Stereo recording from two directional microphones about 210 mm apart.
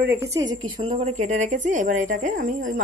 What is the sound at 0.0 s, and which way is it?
A woman's voice, 10° right (ahead or behind).